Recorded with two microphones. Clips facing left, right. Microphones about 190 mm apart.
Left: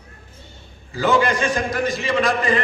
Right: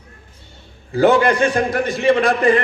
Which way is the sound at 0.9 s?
60° right (ahead or behind).